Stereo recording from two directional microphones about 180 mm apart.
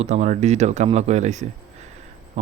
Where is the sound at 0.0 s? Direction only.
40° right (ahead or behind).